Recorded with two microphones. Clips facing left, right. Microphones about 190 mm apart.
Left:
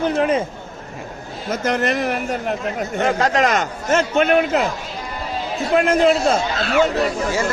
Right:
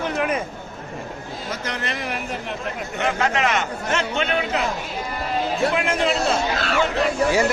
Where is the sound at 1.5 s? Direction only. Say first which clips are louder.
Left 11 dB; 45° left (ahead or behind).